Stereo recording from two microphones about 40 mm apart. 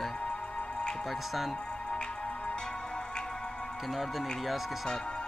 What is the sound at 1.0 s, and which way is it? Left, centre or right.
Speech, centre.